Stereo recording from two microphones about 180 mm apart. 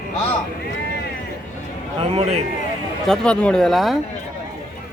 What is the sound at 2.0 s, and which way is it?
Speech, 35° right (ahead or behind).